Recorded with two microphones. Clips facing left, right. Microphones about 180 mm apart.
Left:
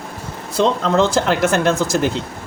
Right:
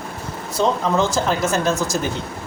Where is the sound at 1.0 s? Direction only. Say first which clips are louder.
Left 4 dB; 85° left.